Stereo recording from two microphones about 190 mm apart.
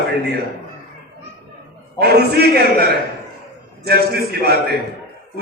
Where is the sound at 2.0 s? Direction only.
55° right (ahead or behind).